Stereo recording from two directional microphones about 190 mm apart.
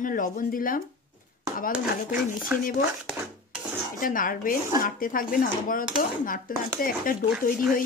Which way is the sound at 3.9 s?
45° left (ahead or behind).